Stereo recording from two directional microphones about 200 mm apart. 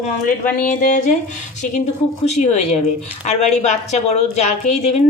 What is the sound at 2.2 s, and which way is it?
A woman's voice, 35° left (ahead or behind).